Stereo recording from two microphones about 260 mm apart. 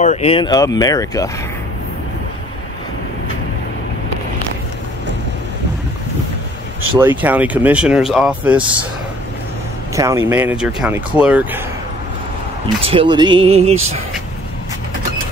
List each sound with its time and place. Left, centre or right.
0.0 s speech: left
7.0 s speech: centre
9.9 s speech: centre
12.8 s speech: centre